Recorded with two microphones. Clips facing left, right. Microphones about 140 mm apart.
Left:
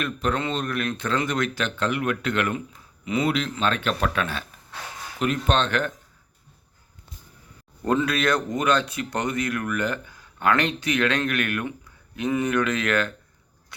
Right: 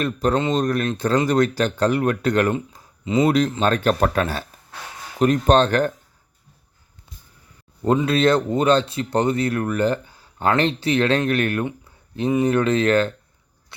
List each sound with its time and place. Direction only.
0.0 s speech: 35° right (ahead or behind)
3.2 s speech: 40° right (ahead or behind)
7.9 s speech: 25° right (ahead or behind)